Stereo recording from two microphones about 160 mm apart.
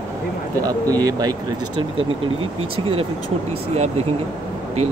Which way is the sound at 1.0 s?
25° right (ahead or behind).